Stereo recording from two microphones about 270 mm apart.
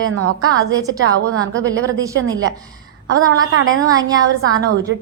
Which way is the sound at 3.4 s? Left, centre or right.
Right.